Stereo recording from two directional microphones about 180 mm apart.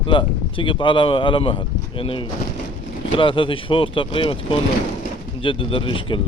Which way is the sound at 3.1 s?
30° left (ahead or behind).